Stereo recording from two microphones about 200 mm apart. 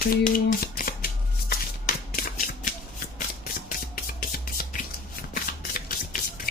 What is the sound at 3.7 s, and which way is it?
Music, 45° left (ahead or behind).